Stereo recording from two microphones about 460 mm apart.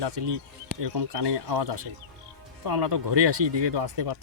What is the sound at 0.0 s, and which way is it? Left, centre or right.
Speech, right.